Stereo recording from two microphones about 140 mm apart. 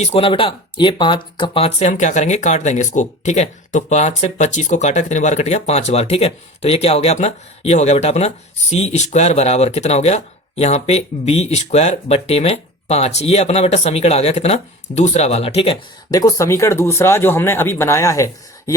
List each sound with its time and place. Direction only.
0.0 s speech: 45° left (ahead or behind)
16.1 s speech: 25° left (ahead or behind)